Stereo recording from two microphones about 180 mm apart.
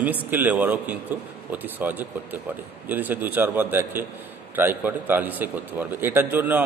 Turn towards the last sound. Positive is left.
turn(degrees=-10)  # may be behind; listen again after turning